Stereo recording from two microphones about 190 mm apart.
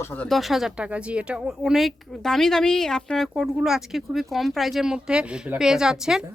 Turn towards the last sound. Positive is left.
turn(degrees=-5)  # may be behind; listen again after turning